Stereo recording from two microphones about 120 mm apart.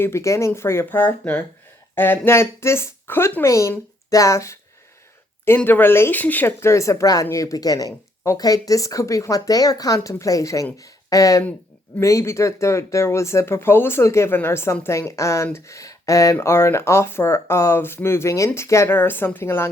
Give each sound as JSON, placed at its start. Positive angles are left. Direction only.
{"t": 0.0, "sound": "speech", "side_deg": 25}
{"t": 5.5, "sound": "speech", "side_deg": 15}